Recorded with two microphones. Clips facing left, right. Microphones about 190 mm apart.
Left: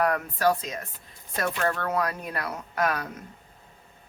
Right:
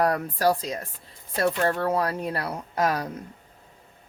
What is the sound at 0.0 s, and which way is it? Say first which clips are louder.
A woman's voice: right 1 dB; 35° right (ahead or behind).